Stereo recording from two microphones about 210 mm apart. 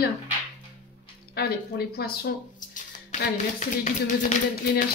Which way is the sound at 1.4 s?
50° left (ahead or behind).